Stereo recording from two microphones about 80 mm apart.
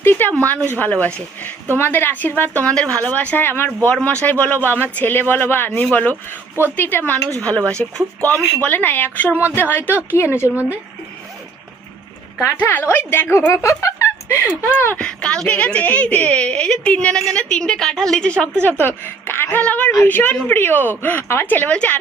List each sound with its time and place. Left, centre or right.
0.0 s a woman's voice: left
10.5 s speech: right
12.4 s speech: left
13.5 s speech: left
14.9 s a woman's voice: centre